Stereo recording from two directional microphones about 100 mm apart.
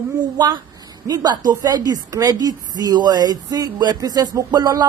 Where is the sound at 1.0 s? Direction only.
40° right (ahead or behind).